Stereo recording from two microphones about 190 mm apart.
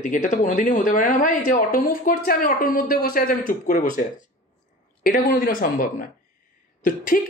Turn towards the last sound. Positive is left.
turn(degrees=45)  # may be behind; listen again after turning